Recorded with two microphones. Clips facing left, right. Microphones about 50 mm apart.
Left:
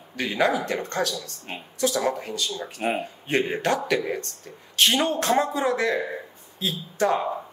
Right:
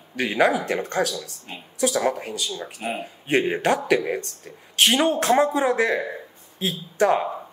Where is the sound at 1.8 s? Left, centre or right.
Centre.